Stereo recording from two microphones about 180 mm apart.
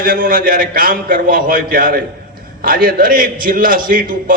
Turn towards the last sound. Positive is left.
turn(degrees=-50)  # may be behind; listen again after turning